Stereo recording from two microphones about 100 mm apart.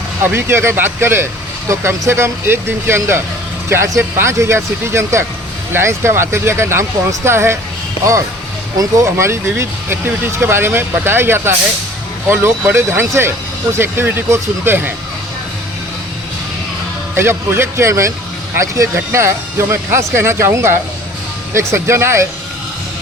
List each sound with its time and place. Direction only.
0.2 s speech: 20° right (ahead or behind)
8.8 s speech: 30° right (ahead or behind)
17.2 s speech: 25° right (ahead or behind)